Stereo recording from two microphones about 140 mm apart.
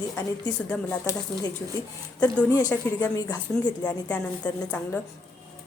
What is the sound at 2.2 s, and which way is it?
Speech, 10° left (ahead or behind).